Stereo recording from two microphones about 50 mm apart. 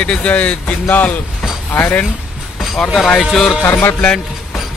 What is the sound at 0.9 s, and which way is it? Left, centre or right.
Speech, left.